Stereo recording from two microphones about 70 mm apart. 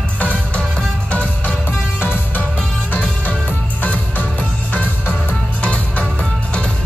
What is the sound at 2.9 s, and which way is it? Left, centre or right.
Music, left.